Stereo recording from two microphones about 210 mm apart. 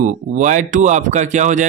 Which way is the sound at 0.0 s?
35° right (ahead or behind).